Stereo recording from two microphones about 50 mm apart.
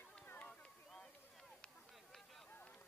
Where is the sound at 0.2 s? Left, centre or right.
Left.